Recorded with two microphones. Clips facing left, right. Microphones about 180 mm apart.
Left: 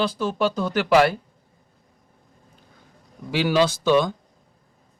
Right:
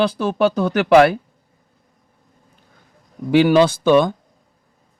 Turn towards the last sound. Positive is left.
turn(degrees=-55)  # may be behind; listen again after turning